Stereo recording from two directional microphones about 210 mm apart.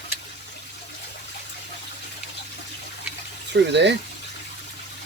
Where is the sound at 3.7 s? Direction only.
55° right (ahead or behind).